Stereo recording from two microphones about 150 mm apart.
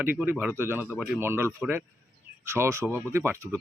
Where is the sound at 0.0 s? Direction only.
10° right (ahead or behind).